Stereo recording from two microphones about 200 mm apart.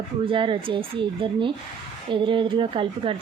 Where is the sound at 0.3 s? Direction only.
25° right (ahead or behind).